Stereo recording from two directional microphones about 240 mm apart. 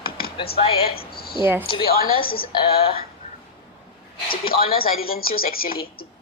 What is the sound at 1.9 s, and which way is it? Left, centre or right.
Speech, left.